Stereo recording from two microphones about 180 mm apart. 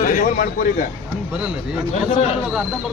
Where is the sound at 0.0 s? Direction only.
45° left (ahead or behind).